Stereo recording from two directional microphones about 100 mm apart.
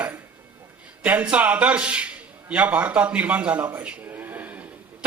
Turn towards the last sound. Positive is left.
turn(degrees=-15)  # may be behind; listen again after turning